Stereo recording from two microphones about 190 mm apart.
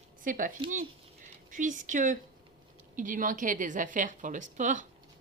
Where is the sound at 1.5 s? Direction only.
40° right (ahead or behind).